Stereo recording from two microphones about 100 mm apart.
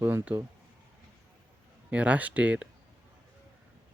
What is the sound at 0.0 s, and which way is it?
Speech, 20° right (ahead or behind).